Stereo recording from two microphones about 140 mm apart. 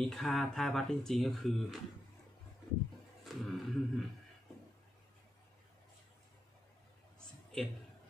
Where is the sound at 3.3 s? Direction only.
Centre (ahead or behind).